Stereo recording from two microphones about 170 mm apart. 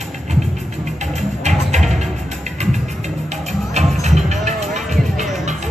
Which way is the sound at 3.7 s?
40° right (ahead or behind).